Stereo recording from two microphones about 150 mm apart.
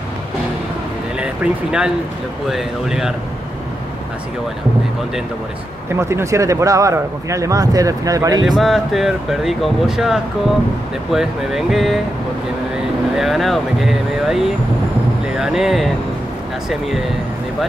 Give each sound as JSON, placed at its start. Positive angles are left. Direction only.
{"t": 1.2, "sound": "speech", "side_deg": -5}
{"t": 5.9, "sound": "speech", "side_deg": -20}
{"t": 8.5, "sound": "speech", "side_deg": 0}
{"t": 13.1, "sound": "speech", "side_deg": 0}